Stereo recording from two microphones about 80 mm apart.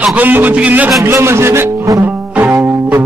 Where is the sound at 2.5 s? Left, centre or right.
Right.